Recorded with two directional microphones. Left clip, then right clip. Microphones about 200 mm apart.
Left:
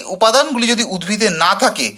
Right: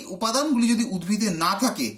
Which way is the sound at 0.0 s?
35° left (ahead or behind).